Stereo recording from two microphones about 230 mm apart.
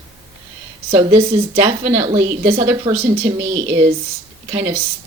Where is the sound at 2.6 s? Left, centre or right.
Centre.